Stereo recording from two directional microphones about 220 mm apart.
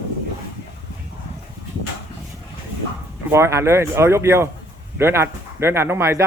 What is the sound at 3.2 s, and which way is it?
Speech, 10° right (ahead or behind).